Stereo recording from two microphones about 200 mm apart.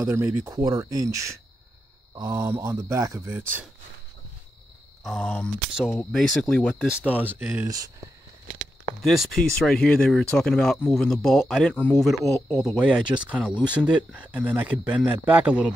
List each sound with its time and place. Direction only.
0.0 s speech: 10° right (ahead or behind)
5.0 s speech: 5° left (ahead or behind); by 7.9 s 15° right (ahead or behind)
9.0 s speech: centre (ahead or behind)
12.6 s speech: 5° right (ahead or behind)